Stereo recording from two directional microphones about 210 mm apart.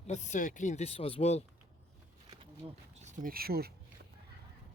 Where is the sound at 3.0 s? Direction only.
40° right (ahead or behind).